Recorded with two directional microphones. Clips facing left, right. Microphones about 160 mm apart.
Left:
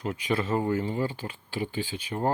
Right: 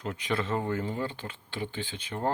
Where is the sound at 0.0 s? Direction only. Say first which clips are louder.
Left 3 dB; 5° left (ahead or behind).